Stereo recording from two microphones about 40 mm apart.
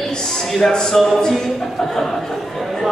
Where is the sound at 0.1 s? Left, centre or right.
Centre.